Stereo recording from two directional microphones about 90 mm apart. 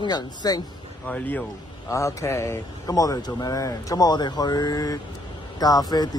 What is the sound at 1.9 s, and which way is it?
Speech, 35° left (ahead or behind).